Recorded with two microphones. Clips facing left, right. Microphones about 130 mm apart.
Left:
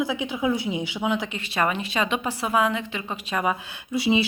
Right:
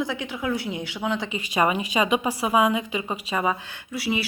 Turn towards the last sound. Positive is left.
turn(degrees=25)  # may be behind; listen again after turning